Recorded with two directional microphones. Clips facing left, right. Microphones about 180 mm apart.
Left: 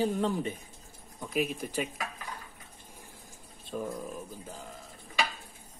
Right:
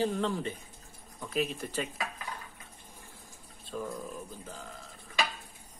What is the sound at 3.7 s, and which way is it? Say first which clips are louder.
Speech: left 2 dB; 20° left (ahead or behind).